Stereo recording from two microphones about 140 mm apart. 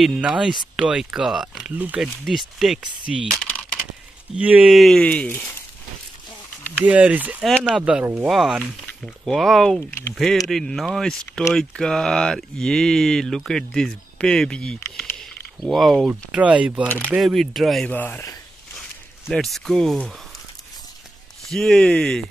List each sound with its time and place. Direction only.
0.0 s speech: 5° right (ahead or behind)
3.4 s a sound: 15° left (ahead or behind)
4.4 s speech: 10° right (ahead or behind); by 5.5 s 10° left (ahead or behind)
6.8 s speech: 10° right (ahead or behind)
7.5 s speech: 5° left (ahead or behind)
7.8 s speech: 10° right (ahead or behind)
9.8 s speech: 20° left (ahead or behind)
10.5 s speech: 5° left (ahead or behind)
15.1 s a sound: centre (ahead or behind)
16.1 s speech: 10° right (ahead or behind)
16.8 s speech: 10° left (ahead or behind)
17.1 s speech: centre (ahead or behind)
17.9 s speech: 15° left (ahead or behind)
21.5 s speech: 5° left (ahead or behind)